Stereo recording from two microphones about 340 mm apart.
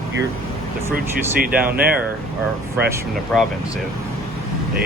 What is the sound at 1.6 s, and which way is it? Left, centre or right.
Speech, right.